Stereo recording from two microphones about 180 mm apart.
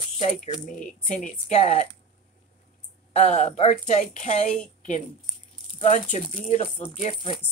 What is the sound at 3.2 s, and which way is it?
A woman's voice, 40° left (ahead or behind).